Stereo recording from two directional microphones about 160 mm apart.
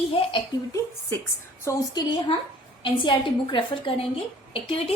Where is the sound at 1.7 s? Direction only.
25° left (ahead or behind).